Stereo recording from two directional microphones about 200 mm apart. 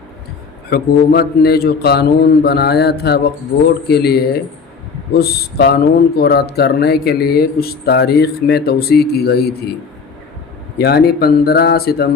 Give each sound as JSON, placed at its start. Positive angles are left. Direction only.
{"t": 0.7, "sound": "speech", "side_deg": 50}
{"t": 10.8, "sound": "speech", "side_deg": 50}